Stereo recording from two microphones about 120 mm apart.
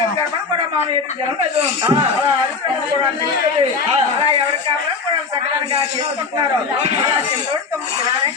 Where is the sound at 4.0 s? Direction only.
60° right (ahead or behind).